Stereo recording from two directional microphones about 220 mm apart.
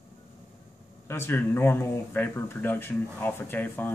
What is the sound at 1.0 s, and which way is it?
Speech, 10° left (ahead or behind).